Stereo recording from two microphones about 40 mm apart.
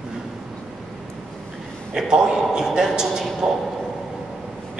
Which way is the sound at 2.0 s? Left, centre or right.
Centre.